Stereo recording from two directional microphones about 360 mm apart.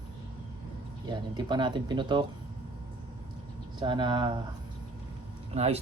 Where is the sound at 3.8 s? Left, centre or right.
Centre.